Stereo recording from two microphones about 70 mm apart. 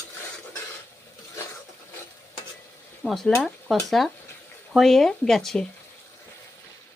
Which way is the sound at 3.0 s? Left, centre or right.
Centre.